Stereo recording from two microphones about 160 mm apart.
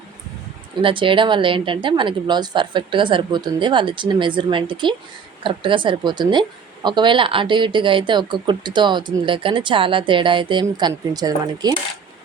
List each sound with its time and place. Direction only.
0.8 s a woman's voice: 30° right (ahead or behind)